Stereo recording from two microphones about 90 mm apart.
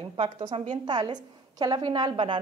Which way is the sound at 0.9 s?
55° right (ahead or behind).